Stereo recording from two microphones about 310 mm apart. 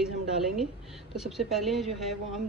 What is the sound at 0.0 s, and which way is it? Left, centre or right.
A woman's voice, centre.